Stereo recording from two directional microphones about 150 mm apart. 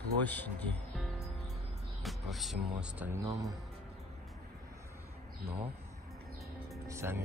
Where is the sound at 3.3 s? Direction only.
25° right (ahead or behind).